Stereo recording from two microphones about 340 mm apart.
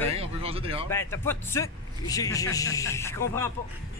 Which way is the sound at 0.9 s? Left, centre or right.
Centre.